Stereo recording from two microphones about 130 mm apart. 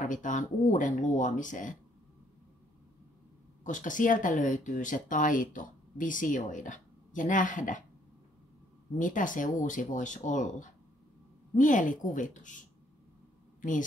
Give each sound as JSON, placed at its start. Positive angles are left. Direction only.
{"t": 0.0, "sound": "speech", "side_deg": 75}
{"t": 3.6, "sound": "speech", "side_deg": 80}
{"t": 8.9, "sound": "a woman's voice", "side_deg": 90}